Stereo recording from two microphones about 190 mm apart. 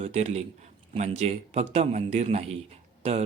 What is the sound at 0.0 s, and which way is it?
Speech, 35° right (ahead or behind).